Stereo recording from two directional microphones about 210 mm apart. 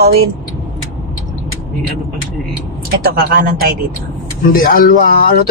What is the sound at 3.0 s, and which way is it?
Speech, 45° right (ahead or behind).